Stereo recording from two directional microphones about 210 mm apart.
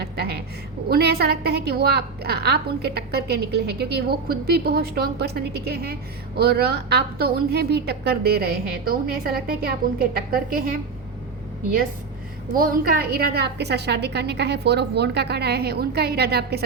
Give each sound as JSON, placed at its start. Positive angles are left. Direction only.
{"t": 0.0, "sound": "a sound", "side_deg": -50}
{"t": 0.9, "sound": "a woman's voice", "side_deg": -50}
{"t": 12.5, "sound": "a woman's voice", "side_deg": -45}